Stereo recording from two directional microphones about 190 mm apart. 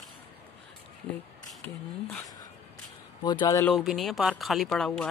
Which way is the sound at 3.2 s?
25° left (ahead or behind).